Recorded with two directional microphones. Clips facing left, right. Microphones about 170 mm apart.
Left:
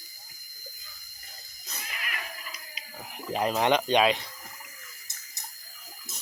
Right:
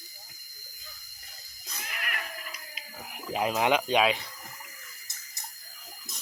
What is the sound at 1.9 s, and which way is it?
Cat, 55° right (ahead or behind).